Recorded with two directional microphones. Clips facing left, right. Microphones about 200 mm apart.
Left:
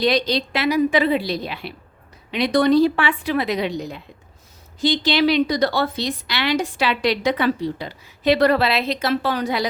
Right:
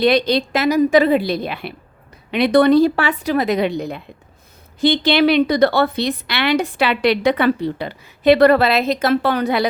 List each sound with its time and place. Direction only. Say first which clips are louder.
0.0 s a woman's voice: right 4 dB; 55° right (ahead or behind)
2.9 s a woman's voice: right 3 dB; 40° right (ahead or behind); by 9.6 s 60° right (ahead or behind)